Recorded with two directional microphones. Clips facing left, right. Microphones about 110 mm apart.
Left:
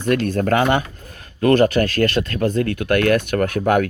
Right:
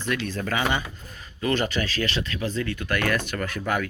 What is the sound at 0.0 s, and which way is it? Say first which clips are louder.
Speech: left 9 dB; 50° left (ahead or behind).